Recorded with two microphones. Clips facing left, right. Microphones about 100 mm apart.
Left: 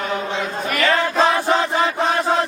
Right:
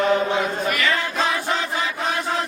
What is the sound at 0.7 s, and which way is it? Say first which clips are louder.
Chant: left 4 dB; 40° left (ahead or behind).